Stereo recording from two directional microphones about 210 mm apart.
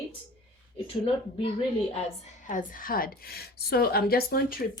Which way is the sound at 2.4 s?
40° left (ahead or behind).